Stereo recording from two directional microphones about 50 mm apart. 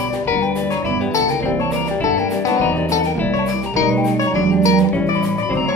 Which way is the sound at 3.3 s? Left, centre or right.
Left.